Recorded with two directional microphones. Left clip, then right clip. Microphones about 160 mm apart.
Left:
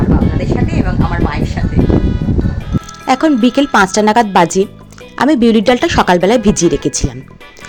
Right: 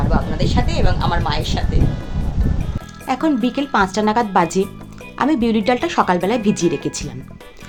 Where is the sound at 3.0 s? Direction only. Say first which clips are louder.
Left 7 dB; 45° left (ahead or behind).